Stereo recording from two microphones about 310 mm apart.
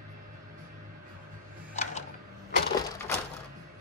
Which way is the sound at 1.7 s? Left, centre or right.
Left.